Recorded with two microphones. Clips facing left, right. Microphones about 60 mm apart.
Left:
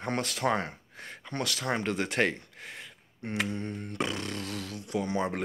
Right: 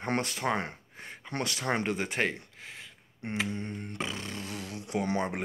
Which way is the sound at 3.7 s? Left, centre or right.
Right.